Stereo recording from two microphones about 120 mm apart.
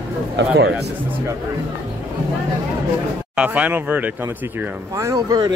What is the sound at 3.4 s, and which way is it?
Speech, 10° right (ahead or behind).